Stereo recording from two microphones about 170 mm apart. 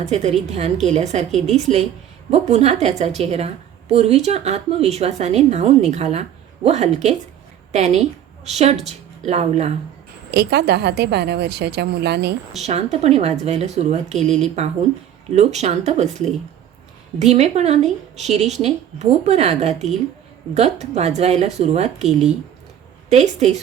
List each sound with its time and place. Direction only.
0.0 s a woman's voice: 40° right (ahead or behind)
10.3 s a woman's voice: 75° right (ahead or behind)
12.5 s a woman's voice: 40° right (ahead or behind)
23.0 s a woman's voice: 40° right (ahead or behind)